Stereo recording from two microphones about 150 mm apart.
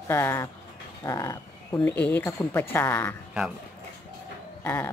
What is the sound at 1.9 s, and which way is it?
Speech, 10° left (ahead or behind).